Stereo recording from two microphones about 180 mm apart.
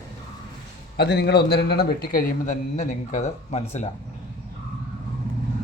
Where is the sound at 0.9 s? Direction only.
65° left (ahead or behind).